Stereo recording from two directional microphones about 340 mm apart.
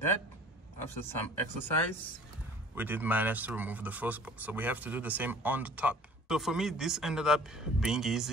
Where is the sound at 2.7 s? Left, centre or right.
Centre.